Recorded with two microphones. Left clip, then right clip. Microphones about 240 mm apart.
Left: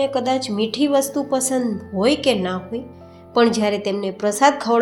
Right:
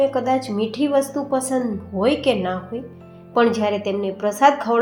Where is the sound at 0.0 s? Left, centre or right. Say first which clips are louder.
Right 1 dB; left.